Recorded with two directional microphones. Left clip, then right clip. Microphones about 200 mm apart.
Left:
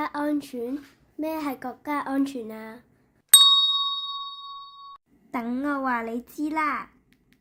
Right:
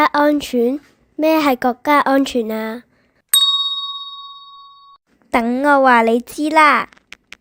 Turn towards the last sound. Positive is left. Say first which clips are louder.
# right 15 dB
turn(degrees=-40)  # may be behind; listen again after turning